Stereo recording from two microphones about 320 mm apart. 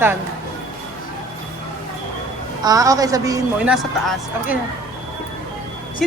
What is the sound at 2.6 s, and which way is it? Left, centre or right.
A woman's voice, centre.